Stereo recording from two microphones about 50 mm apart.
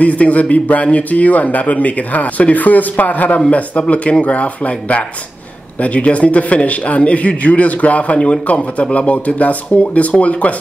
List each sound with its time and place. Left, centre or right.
0.0 s speech: left
3.3 s speech: left